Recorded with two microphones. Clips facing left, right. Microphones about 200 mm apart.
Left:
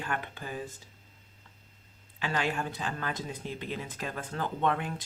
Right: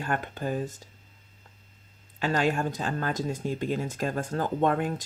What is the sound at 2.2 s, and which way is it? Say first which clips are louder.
Speech: right 6 dB; 45° right (ahead or behind).